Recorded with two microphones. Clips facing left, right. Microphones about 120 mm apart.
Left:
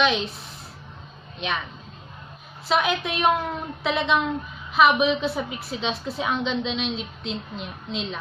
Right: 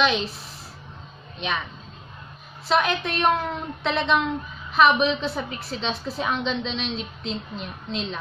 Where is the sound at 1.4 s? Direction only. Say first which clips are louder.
Even; centre (ahead or behind).